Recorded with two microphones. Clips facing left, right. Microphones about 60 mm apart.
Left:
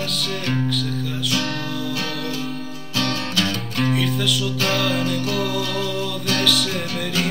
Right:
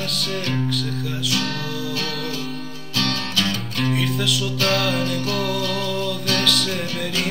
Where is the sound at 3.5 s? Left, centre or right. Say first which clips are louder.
Left 1 dB; centre.